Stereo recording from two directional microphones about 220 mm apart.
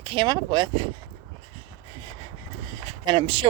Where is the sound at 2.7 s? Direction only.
20° right (ahead or behind).